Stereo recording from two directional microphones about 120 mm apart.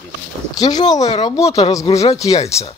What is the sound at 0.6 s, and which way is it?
Speech, 35° left (ahead or behind).